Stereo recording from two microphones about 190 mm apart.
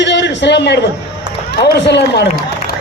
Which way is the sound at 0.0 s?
70° left (ahead or behind).